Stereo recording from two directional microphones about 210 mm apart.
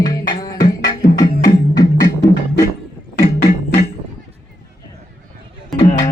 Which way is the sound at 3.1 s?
45° left (ahead or behind).